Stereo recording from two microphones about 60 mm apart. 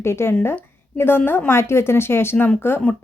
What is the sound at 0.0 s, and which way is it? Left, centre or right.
Speech, left.